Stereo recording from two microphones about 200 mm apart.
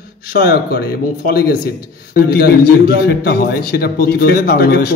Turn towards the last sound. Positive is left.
turn(degrees=50)  # may be behind; listen again after turning